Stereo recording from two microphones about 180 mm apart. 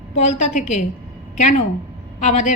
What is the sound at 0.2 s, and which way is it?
A woman's voice, 40° left (ahead or behind).